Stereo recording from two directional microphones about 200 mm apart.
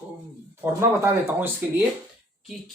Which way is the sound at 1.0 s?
10° right (ahead or behind).